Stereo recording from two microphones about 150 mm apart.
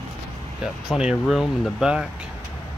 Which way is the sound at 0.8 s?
5° right (ahead or behind).